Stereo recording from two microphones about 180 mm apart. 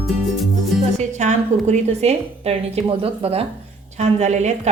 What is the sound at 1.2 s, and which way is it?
A woman's voice, 40° right (ahead or behind).